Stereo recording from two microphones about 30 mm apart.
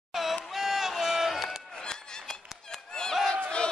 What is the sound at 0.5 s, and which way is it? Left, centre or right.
Music, centre.